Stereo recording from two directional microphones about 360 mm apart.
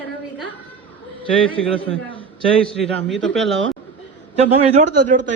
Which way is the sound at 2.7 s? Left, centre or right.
Centre.